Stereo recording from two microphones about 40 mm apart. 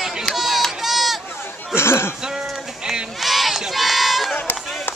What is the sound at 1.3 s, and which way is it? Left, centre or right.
Chatter, left.